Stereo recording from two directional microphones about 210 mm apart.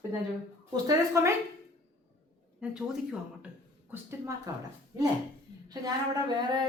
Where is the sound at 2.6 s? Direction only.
5° right (ahead or behind).